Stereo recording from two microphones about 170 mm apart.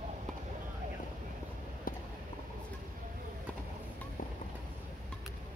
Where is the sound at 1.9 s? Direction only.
55° left (ahead or behind).